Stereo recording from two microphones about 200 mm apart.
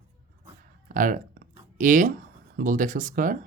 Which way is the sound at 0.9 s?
45° right (ahead or behind).